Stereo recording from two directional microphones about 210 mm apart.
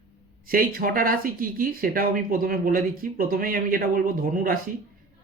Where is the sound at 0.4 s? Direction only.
45° right (ahead or behind).